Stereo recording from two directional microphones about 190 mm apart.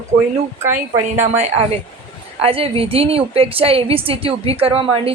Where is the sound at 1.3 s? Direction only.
35° right (ahead or behind).